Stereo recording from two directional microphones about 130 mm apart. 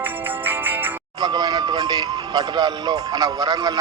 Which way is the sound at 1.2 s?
30° right (ahead or behind).